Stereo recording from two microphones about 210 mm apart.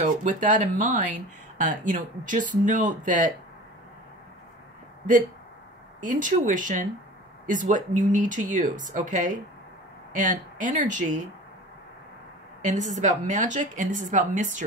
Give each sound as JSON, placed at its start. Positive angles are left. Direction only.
{"t": 0.0, "sound": "speech", "side_deg": -35}
{"t": 5.9, "sound": "speech", "side_deg": -40}
{"t": 12.6, "sound": "speech", "side_deg": -35}